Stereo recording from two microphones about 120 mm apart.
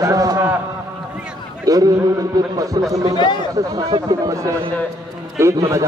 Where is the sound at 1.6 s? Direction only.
30° right (ahead or behind).